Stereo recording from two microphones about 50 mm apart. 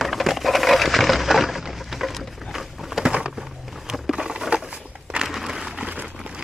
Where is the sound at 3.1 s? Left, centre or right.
Centre.